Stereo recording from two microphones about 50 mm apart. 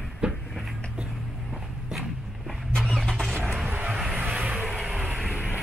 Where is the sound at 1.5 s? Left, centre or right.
Centre.